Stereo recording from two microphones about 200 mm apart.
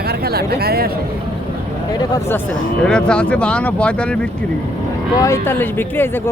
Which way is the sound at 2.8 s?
5° left (ahead or behind).